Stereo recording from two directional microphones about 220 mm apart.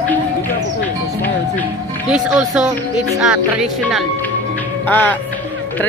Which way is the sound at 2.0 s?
5° right (ahead or behind).